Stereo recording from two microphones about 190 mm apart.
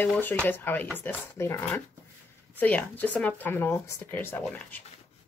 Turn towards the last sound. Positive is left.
turn(degrees=10)  # may be behind; listen again after turning